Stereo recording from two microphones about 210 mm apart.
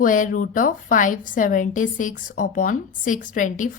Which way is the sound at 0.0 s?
40° left (ahead or behind).